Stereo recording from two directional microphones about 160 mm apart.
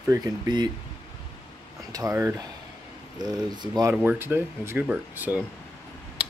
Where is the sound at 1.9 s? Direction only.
20° right (ahead or behind).